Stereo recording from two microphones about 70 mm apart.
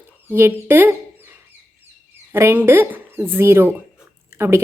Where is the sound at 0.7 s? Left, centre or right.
Right.